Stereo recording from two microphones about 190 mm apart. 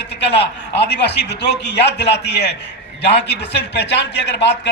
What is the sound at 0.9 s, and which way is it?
A man's voice, 65° left (ahead or behind).